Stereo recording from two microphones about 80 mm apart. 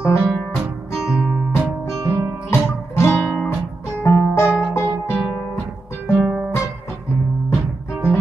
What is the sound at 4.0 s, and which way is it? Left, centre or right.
Music, left.